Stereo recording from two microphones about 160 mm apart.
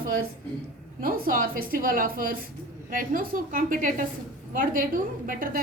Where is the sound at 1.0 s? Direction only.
65° right (ahead or behind).